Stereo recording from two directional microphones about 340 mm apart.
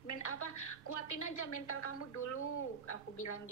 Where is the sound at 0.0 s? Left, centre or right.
Left.